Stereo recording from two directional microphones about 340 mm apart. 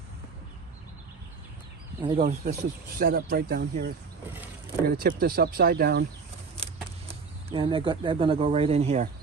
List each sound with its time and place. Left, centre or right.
2.0 s speech: centre
2.2 s speech: right
6.6 s vehicle: centre
7.1 s speech: centre